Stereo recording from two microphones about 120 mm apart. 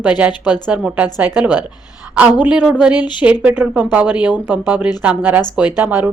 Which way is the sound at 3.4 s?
15° right (ahead or behind).